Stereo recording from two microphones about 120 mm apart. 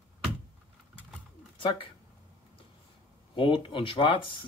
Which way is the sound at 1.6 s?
45° left (ahead or behind).